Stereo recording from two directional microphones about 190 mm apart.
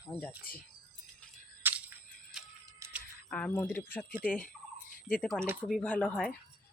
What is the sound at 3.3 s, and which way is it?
Speech, 5° left (ahead or behind).